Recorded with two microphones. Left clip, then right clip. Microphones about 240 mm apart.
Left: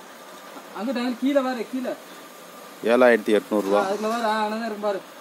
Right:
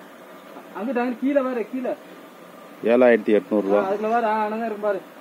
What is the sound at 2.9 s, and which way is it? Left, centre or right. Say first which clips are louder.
Speech: right 1 dB; centre.